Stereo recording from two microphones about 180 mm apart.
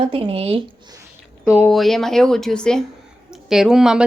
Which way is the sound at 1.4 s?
15° left (ahead or behind).